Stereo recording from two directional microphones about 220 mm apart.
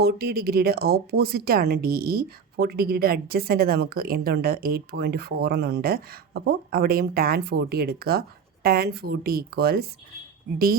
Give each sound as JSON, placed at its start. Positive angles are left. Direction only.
{"t": 0.0, "sound": "a woman's voice", "side_deg": -45}